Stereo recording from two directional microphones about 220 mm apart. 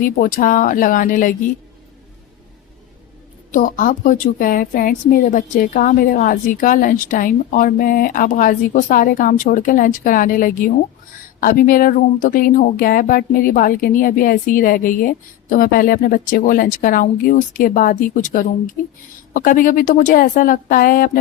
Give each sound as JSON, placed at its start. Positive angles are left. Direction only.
{"t": 0.0, "sound": "speech", "side_deg": 40}
{"t": 3.5, "sound": "speech", "side_deg": 35}